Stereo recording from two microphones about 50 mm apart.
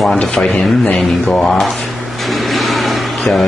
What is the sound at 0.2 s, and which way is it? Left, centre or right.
Speech, left.